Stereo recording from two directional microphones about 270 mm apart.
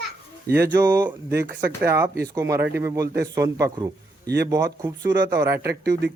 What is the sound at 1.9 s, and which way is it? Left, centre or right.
A man's voice, centre.